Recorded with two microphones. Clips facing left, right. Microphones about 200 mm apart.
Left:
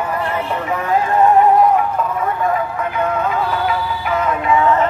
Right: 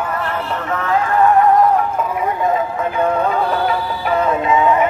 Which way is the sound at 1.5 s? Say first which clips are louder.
Even; 5° left (ahead or behind).